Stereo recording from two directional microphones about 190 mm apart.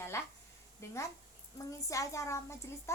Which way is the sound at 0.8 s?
15° left (ahead or behind).